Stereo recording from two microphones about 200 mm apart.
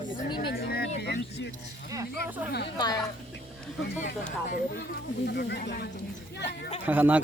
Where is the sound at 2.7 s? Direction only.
20° left (ahead or behind).